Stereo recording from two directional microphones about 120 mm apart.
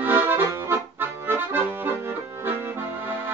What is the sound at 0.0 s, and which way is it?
Accordion, 20° right (ahead or behind).